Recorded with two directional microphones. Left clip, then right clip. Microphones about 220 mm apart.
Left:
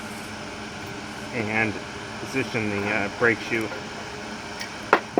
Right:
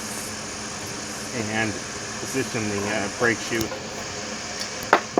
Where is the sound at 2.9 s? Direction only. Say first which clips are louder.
Left 1 dB; 10° right (ahead or behind).